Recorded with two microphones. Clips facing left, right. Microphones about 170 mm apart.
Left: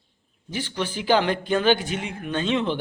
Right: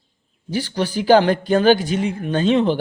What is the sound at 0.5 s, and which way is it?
Speech, 40° right (ahead or behind).